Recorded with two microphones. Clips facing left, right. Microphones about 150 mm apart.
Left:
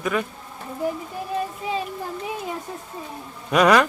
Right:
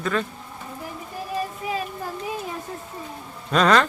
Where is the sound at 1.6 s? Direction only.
30° left (ahead or behind).